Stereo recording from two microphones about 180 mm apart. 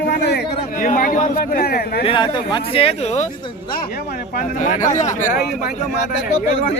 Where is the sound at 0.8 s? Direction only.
50° left (ahead or behind).